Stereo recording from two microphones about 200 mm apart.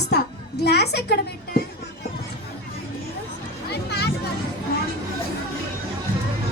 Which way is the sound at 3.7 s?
55° left (ahead or behind).